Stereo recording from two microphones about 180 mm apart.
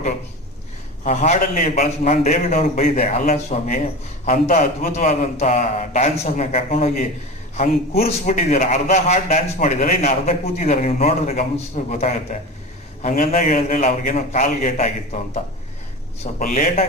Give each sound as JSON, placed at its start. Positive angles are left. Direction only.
{"t": 1.0, "sound": "a man's voice", "side_deg": 40}
{"t": 16.4, "sound": "a man's voice", "side_deg": 50}